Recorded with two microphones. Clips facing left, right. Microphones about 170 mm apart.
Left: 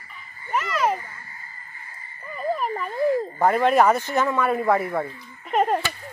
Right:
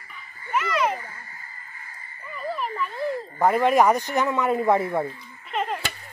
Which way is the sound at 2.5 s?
45° left (ahead or behind).